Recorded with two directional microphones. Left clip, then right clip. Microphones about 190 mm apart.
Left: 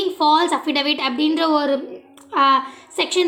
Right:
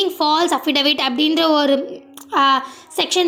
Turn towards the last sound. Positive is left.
turn(degrees=-25)  # may be behind; listen again after turning